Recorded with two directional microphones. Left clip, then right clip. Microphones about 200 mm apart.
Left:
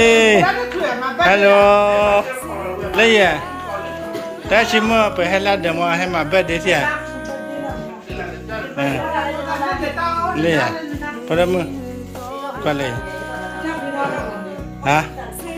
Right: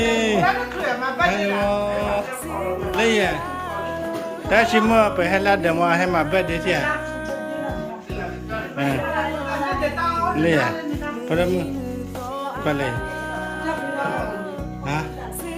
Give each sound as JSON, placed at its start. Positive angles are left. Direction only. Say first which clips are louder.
{"t": 0.0, "sound": "music", "louder": "left 7 dB", "side_deg": 0}
{"t": 2.9, "sound": "a man's voice", "louder": "left 8 dB", "side_deg": -5}
{"t": 4.4, "sound": "a man's voice", "louder": "left 2 dB", "side_deg": -15}
{"t": 10.3, "sound": "a man's voice", "louder": "left 2 dB", "side_deg": -15}
{"t": 12.6, "sound": "a man's voice", "louder": "left 3 dB", "side_deg": -10}
{"t": 14.9, "sound": "music", "louder": "left 11 dB", "side_deg": 0}